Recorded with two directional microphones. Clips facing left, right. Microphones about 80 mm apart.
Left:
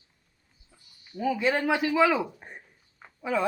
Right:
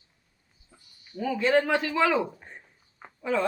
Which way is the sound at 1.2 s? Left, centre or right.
Centre.